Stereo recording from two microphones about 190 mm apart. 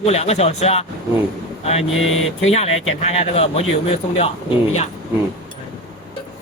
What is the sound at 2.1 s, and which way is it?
Speech, 90° left.